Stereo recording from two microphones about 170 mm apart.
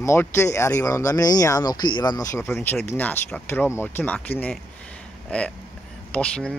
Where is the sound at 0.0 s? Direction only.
15° left (ahead or behind).